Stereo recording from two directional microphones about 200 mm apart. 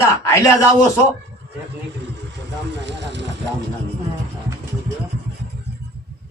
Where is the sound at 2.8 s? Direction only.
60° right (ahead or behind).